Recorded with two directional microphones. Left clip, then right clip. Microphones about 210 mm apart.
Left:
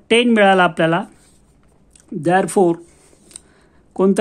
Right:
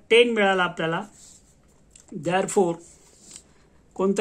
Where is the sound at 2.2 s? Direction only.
40° left (ahead or behind).